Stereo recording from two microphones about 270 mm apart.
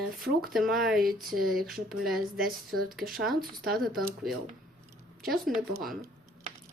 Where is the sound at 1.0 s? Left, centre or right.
Right.